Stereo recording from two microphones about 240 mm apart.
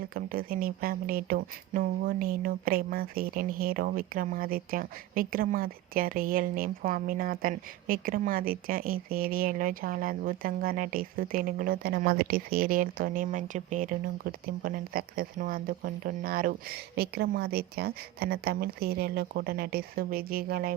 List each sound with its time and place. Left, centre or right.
0.1 s speech: right